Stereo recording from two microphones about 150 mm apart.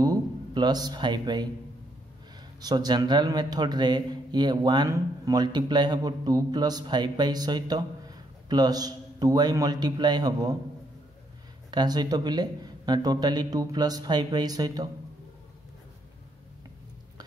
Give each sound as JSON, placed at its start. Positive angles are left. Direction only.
{"t": 0.0, "sound": "speech", "side_deg": -25}
{"t": 2.6, "sound": "a man's voice", "side_deg": -30}
{"t": 11.7, "sound": "a man's voice", "side_deg": -30}